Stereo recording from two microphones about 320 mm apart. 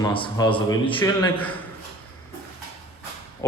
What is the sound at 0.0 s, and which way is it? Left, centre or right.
Speech, centre.